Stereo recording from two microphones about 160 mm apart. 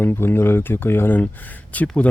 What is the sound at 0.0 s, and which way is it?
Speech, 15° left (ahead or behind).